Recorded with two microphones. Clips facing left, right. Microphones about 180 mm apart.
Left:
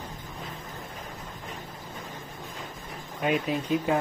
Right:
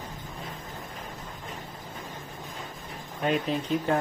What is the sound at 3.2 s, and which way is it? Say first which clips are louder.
Speech: even; 5° left (ahead or behind).